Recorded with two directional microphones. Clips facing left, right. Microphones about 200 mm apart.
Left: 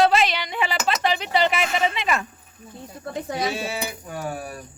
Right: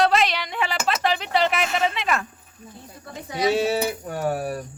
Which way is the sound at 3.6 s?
60° right (ahead or behind).